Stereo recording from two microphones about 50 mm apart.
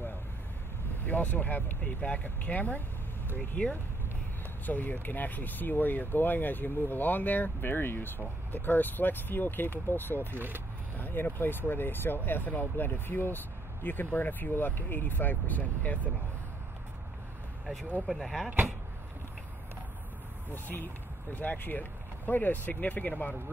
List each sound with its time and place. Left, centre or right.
1.0 s speech: left
4.6 s speech: left
10.3 s speech: right
11.0 s speech: left
18.0 s speech: centre
20.5 s speech: left